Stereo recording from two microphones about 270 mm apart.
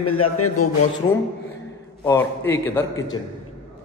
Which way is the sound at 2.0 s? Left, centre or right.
Centre.